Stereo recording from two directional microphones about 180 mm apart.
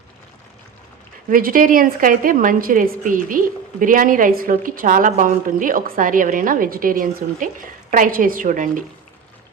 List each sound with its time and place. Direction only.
1.3 s a woman's voice: 50° right (ahead or behind)